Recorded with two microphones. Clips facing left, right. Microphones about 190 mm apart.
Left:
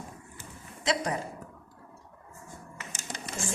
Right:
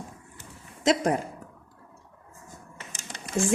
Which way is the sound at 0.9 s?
50° right (ahead or behind).